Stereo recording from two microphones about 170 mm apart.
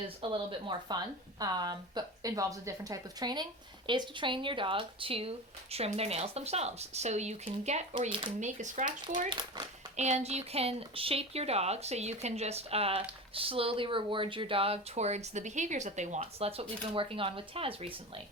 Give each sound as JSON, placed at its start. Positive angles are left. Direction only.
{"t": 0.2, "sound": "a woman's voice", "side_deg": -30}
{"t": 8.4, "sound": "speech", "side_deg": -45}
{"t": 9.3, "sound": "a woman's voice", "side_deg": -25}
{"t": 10.0, "sound": "speech", "side_deg": -40}